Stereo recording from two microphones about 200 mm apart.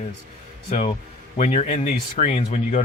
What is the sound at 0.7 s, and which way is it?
Speech, 30° left (ahead or behind).